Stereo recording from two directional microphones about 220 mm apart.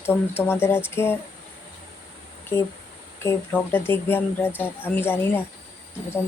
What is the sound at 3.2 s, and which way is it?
Speech, 10° left (ahead or behind).